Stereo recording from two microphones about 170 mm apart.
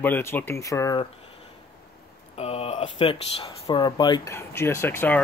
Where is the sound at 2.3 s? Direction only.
35° left (ahead or behind).